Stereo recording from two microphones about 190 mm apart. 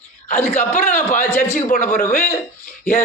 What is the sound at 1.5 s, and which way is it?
Speech, 45° left (ahead or behind).